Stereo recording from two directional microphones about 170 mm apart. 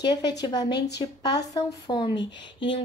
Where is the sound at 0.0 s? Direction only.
25° left (ahead or behind).